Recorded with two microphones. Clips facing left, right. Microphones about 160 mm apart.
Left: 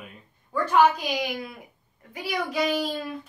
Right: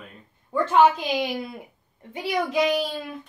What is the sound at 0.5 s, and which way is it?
A woman's voice, 25° right (ahead or behind).